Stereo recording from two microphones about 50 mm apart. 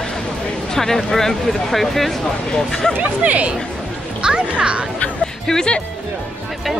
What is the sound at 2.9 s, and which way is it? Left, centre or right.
Speech, right.